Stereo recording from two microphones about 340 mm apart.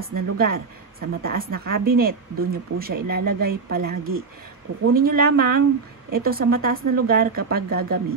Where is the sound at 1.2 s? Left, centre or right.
Right.